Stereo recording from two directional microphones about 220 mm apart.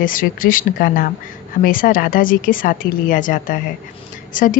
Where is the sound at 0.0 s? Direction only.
40° left (ahead or behind).